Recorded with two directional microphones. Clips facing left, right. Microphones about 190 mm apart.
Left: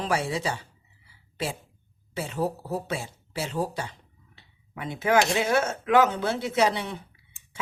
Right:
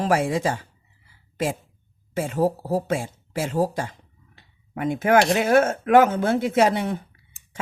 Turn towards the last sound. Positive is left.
turn(degrees=-45)  # may be behind; listen again after turning